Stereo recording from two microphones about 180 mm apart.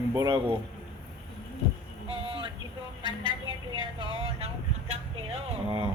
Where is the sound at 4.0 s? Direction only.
30° right (ahead or behind).